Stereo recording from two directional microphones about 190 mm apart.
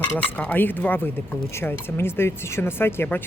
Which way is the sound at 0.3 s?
10° left (ahead or behind).